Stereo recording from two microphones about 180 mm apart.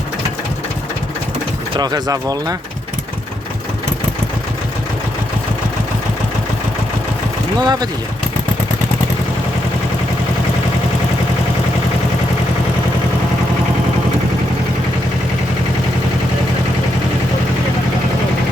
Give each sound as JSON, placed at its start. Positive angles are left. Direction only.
{"t": 1.7, "sound": "speech", "side_deg": -20}
{"t": 7.6, "sound": "speech", "side_deg": -25}